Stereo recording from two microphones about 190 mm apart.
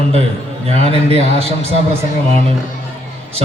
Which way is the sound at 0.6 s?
30° right (ahead or behind).